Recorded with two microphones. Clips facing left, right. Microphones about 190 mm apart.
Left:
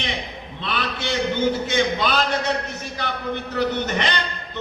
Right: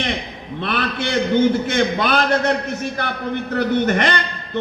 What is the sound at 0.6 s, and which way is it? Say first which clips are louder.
A man's voice: right 5 dB; 55° right (ahead or behind).